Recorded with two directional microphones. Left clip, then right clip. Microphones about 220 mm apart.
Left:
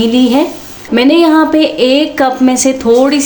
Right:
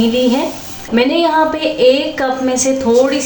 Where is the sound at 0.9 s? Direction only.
50° left (ahead or behind).